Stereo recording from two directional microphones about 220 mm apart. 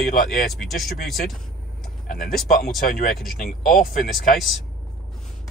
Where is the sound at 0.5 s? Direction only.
Centre (ahead or behind).